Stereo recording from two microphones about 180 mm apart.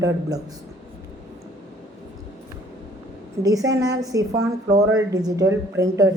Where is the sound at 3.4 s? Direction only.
20° right (ahead or behind).